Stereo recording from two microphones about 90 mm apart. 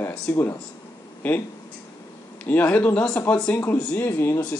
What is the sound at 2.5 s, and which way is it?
A man's voice, 20° left (ahead or behind).